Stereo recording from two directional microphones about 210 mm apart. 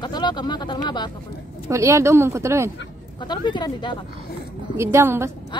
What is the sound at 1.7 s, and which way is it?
Speech, 15° right (ahead or behind).